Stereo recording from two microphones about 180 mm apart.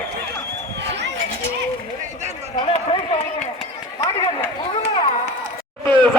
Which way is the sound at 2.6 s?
30° left (ahead or behind).